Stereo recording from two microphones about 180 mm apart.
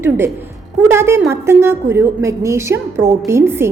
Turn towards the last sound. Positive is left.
turn(degrees=-15)  # may be behind; listen again after turning